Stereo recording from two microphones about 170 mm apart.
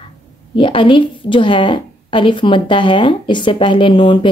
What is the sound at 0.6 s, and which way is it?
A woman's voice, 30° left (ahead or behind).